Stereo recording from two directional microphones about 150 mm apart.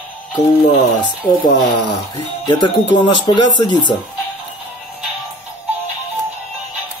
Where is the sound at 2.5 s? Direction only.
30° left (ahead or behind).